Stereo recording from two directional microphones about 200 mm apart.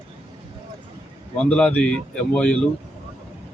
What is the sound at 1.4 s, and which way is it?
Speech, 5° left (ahead or behind).